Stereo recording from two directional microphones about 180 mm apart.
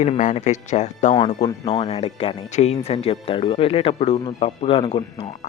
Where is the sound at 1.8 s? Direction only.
35° left (ahead or behind).